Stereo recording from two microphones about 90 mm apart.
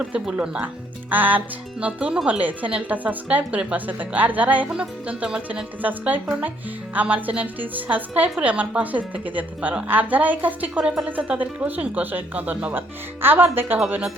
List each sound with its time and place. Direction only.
0.0 s a woman's voice: 15° right (ahead or behind)
13.7 s a woman's voice: 10° right (ahead or behind)